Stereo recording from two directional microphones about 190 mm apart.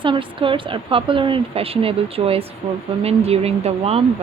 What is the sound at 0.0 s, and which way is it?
A woman's voice, 25° right (ahead or behind).